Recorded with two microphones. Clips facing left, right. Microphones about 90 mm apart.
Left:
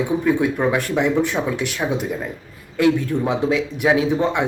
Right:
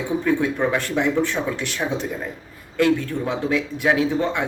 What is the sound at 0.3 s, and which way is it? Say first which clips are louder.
A man's voice: left 1 dB; 15° left (ahead or behind).